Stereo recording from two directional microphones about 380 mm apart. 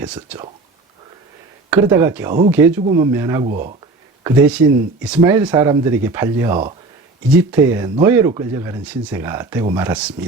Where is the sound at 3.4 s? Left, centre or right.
Right.